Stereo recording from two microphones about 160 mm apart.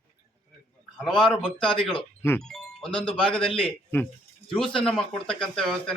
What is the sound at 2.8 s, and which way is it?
Speech, 30° left (ahead or behind).